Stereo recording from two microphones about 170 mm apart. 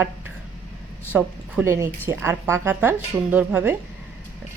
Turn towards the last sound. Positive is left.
turn(degrees=-10)  # may be behind; listen again after turning